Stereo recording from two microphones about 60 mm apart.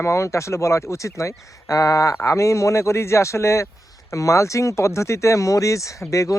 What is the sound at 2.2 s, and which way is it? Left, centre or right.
Speech, left.